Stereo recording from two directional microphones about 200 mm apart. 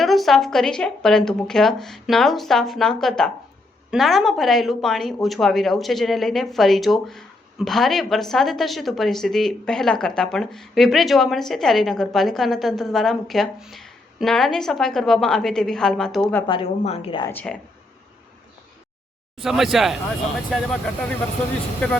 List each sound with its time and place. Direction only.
0.0 s speech: centre (ahead or behind)
16.5 s a woman's voice: 30° left (ahead or behind)
17.2 s speech: 5° left (ahead or behind)
19.4 s speech: centre (ahead or behind)